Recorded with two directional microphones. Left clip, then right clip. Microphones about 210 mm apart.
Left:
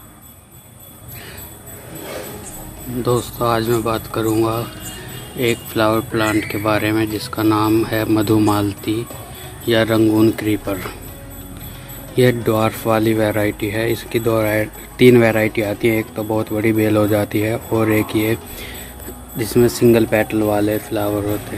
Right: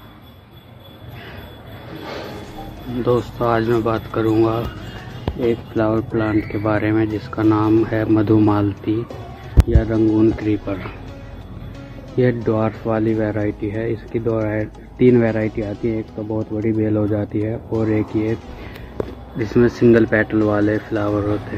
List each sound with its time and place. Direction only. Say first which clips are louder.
3.0 s speech: even; 15° left (ahead or behind)
9.7 s speech: left 4 dB; 25° left (ahead or behind)
12.2 s speech: left 3 dB; 20° left (ahead or behind)